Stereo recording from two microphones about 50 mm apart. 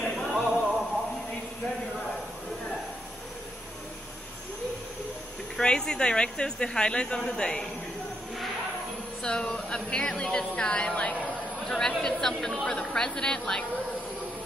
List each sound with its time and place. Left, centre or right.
0.0 s music: centre
5.6 s speech: centre
9.2 s speech: centre
11.6 s speech: centre